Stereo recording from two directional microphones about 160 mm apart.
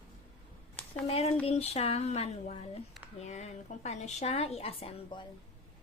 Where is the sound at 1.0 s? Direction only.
40° left (ahead or behind).